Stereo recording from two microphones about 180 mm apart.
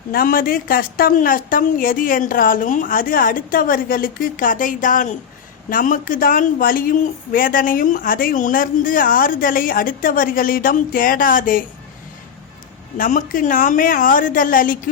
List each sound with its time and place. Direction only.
0.1 s speech: 55° left (ahead or behind)
13.0 s speech: 45° left (ahead or behind)